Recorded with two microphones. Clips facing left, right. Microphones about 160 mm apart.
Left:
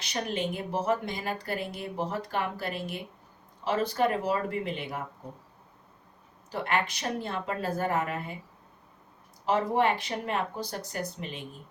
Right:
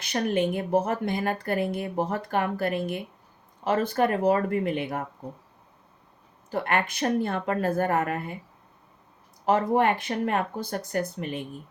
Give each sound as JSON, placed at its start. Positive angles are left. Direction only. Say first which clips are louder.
{"t": 0.0, "sound": "speech", "louder": "right 6 dB", "side_deg": -55}
{"t": 6.5, "sound": "speech", "louder": "right 3 dB", "side_deg": -55}
{"t": 9.5, "sound": "speech", "louder": "right 3 dB", "side_deg": -50}